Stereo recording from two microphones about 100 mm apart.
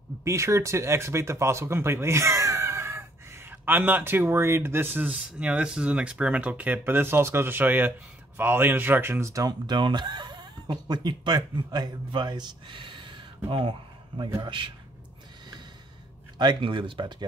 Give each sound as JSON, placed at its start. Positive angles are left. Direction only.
{"t": 0.2, "sound": "a man's voice", "side_deg": -30}
{"t": 16.3, "sound": "speech", "side_deg": -50}